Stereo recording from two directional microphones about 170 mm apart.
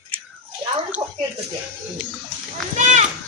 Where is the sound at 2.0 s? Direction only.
5° right (ahead or behind).